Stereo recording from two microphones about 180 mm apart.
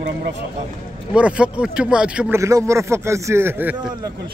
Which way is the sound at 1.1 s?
5° right (ahead or behind).